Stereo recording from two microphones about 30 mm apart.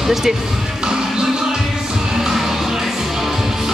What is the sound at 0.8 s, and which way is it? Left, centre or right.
Music, right.